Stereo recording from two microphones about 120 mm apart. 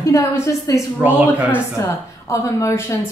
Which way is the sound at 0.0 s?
25° left (ahead or behind).